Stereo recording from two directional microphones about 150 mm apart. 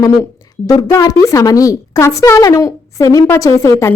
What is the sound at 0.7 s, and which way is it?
A woman's voice, 25° left (ahead or behind).